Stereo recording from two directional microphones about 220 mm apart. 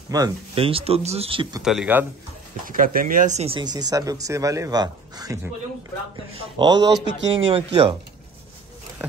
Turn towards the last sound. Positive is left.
turn(degrees=-25)  # may be behind; listen again after turning